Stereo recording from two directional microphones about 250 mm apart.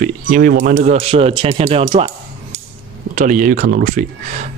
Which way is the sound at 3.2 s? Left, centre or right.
Right.